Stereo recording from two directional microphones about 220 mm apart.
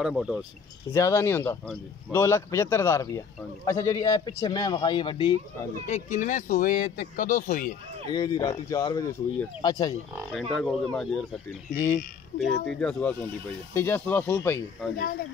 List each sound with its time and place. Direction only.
0.0 s speech: centre (ahead or behind)
0.9 s a man's voice: 15° left (ahead or behind); by 7.7 s 35° left (ahead or behind)
8.1 s a man's voice: 20° left (ahead or behind)
10.3 s speech: 5° left (ahead or behind)
11.7 s a man's voice: 15° left (ahead or behind)
12.6 s a man's voice: 5° left (ahead or behind)